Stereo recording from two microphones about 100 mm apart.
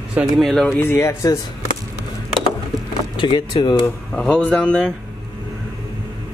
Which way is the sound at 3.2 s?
45° left (ahead or behind).